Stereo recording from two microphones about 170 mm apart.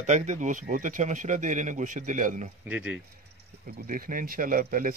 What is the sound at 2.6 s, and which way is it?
Speech, 10° right (ahead or behind).